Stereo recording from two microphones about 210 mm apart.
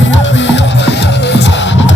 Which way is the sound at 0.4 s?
55° left (ahead or behind).